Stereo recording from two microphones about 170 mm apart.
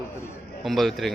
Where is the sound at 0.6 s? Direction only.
Centre (ahead or behind).